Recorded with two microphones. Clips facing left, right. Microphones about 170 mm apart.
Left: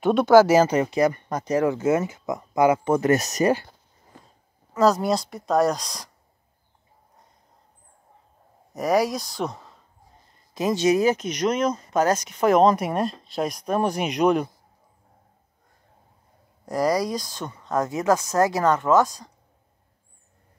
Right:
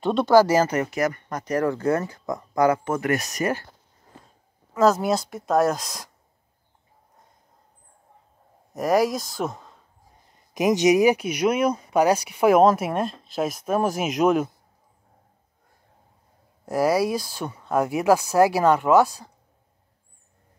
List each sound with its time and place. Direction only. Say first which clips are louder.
0.0 s speech: left 2 dB; 5° left (ahead or behind)
0.7 s speech: left 3 dB; 30° left (ahead or behind)
1.5 s speech: left 1 dB; 10° left (ahead or behind)
1.8 s speech: left 1 dB; 20° left (ahead or behind)
4.7 s speech: even; centre (ahead or behind)
8.7 s speech: right 1 dB; centre (ahead or behind)
10.5 s speech: right 2 dB; 15° right (ahead or behind)
16.6 s speech: right 2 dB; 5° right (ahead or behind)